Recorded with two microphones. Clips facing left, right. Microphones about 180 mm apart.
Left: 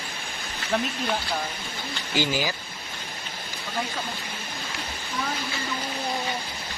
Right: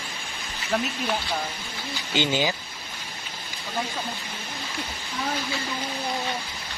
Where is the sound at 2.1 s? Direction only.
20° right (ahead or behind).